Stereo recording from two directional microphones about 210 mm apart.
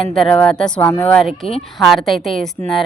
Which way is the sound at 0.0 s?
Centre (ahead or behind).